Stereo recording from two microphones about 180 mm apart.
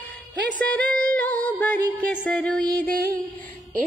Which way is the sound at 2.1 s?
5° left (ahead or behind).